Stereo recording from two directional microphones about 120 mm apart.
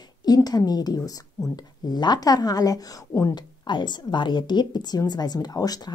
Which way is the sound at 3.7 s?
40° left (ahead or behind).